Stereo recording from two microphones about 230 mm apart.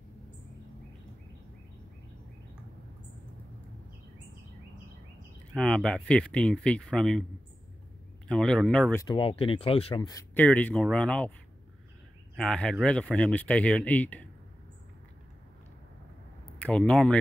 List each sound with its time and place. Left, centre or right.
5.5 s speech: centre
8.3 s speech: centre
9.0 s speech: left
10.3 s speech: centre
12.4 s speech: centre
16.6 s speech: centre